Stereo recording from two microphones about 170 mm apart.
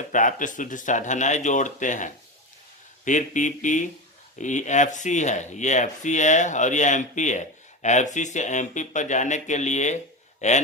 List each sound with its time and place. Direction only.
0.1 s speech: 50° left (ahead or behind)